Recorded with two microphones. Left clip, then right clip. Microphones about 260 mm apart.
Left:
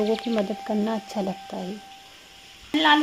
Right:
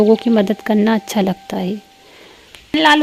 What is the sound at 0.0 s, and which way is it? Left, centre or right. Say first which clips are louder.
Speech: right 11 dB; right.